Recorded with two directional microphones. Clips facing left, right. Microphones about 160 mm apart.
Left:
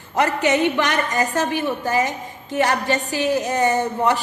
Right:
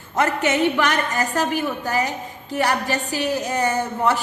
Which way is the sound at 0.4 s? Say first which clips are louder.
Even; 20° left (ahead or behind).